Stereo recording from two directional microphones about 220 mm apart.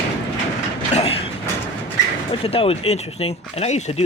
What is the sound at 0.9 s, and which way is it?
Mechanisms, 25° left (ahead or behind).